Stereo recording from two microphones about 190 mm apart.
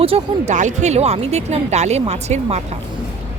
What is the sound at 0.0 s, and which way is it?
Speech, 35° right (ahead or behind).